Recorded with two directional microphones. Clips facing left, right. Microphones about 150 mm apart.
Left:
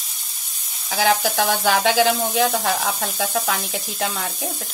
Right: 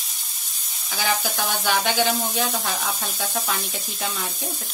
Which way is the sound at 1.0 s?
90° left.